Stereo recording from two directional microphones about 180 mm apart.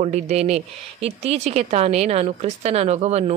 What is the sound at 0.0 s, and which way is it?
A woman's voice, 35° right (ahead or behind).